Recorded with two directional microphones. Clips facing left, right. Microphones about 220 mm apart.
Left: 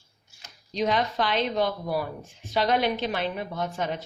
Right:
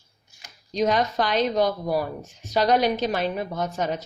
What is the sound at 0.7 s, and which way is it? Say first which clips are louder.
Speech: right 3 dB; 45° right (ahead or behind).